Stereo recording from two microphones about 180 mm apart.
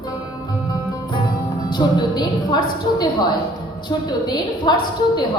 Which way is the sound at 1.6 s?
25° left (ahead or behind).